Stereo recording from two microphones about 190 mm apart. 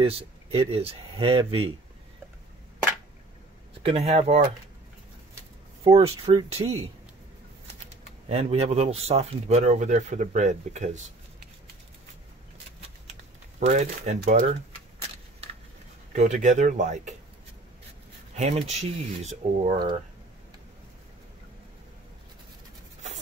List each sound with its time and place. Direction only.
0.0 s speech: 30° right (ahead or behind)
3.8 s speech: 30° right (ahead or behind)
5.9 s speech: 30° right (ahead or behind)
8.3 s speech: 35° right (ahead or behind)
13.6 s speech: 35° right (ahead or behind)
16.1 s speech: 40° right (ahead or behind)
18.3 s speech: 35° right (ahead or behind)